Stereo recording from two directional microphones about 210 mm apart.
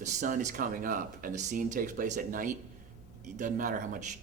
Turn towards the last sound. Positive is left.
turn(degrees=-35)  # may be behind; listen again after turning